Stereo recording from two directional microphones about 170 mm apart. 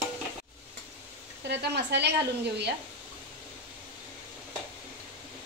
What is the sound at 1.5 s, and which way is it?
Speech, 80° right.